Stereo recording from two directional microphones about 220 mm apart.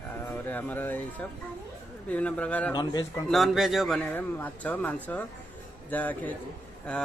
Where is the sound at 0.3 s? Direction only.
10° left (ahead or behind).